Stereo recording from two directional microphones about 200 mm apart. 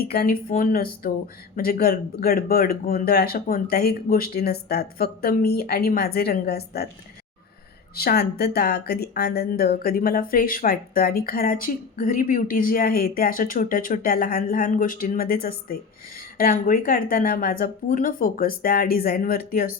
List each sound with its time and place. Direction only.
0.0 s speech: 50° left (ahead or behind)
7.9 s speech: 50° left (ahead or behind)